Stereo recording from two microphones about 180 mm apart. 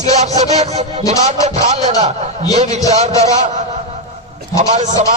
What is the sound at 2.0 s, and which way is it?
Speech, 35° right (ahead or behind).